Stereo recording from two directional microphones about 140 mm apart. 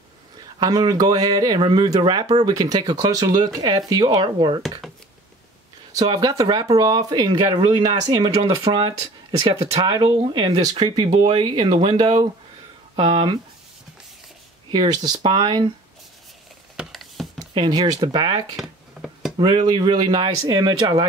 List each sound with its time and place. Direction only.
0.6 s speech: 30° right (ahead or behind)
5.9 s speech: 30° right (ahead or behind)
14.7 s speech: 30° right (ahead or behind)
16.7 s a sound: centre (ahead or behind)
17.6 s speech: 30° right (ahead or behind)
18.6 s a sound: 5° right (ahead or behind)
19.3 s speech: 30° right (ahead or behind)